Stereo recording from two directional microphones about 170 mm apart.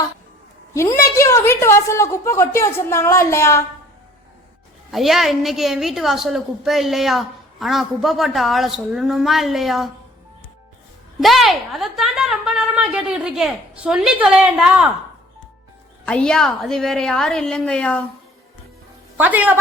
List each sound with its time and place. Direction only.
0.7 s a woman's voice: 15° left (ahead or behind)
4.9 s a woman's voice: centre (ahead or behind)
11.2 s a woman's voice: centre (ahead or behind)
16.0 s a woman's voice: 5° left (ahead or behind)
19.1 s a woman's voice: 10° right (ahead or behind)